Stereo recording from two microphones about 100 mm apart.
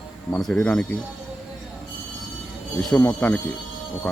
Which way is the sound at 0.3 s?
5° left (ahead or behind).